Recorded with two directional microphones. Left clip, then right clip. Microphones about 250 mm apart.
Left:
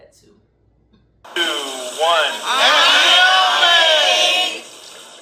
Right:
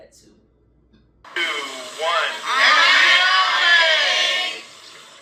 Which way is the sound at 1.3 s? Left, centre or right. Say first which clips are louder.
Left 3 dB; left.